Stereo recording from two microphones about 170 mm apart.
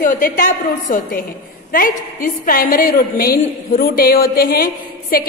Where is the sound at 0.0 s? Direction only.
55° left (ahead or behind).